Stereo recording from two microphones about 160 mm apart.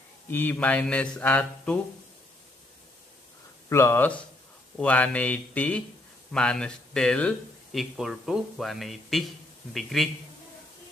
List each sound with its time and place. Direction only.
0.3 s speech: 10° left (ahead or behind)
3.6 s speech: 15° left (ahead or behind); by 10.0 s centre (ahead or behind)